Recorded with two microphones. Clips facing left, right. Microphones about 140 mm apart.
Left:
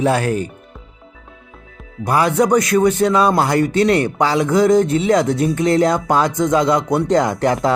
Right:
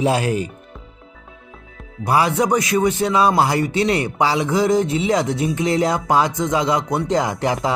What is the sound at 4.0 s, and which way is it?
Speech, 5° right (ahead or behind).